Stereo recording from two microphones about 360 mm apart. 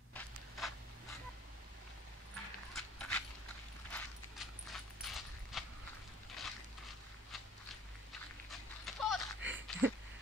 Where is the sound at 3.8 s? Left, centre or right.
Centre.